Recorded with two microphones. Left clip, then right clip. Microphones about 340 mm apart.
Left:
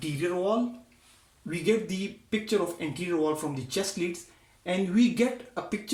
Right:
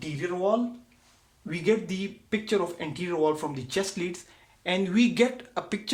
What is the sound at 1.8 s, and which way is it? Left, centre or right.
Speech, right.